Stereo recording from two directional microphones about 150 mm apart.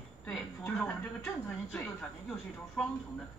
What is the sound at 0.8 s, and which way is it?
A woman's voice, 15° left (ahead or behind).